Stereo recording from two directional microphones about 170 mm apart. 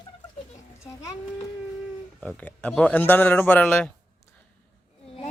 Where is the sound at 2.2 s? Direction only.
10° left (ahead or behind).